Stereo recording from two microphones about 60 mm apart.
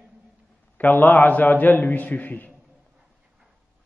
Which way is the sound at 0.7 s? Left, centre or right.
Left.